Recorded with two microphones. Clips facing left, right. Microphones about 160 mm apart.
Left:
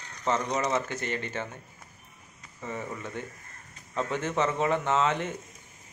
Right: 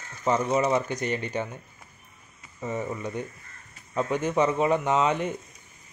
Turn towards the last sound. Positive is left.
turn(degrees=-15)  # may be behind; listen again after turning